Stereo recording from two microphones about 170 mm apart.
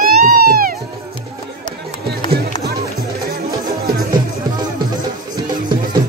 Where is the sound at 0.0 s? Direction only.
60° right (ahead or behind).